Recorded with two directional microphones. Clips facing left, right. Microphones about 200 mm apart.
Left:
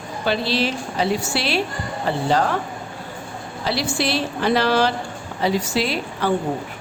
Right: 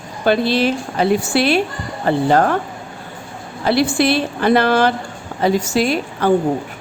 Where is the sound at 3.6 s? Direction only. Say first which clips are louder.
Right 8 dB; 55° right (ahead or behind).